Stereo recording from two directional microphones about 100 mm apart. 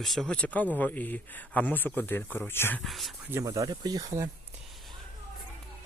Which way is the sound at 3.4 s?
40° right (ahead or behind).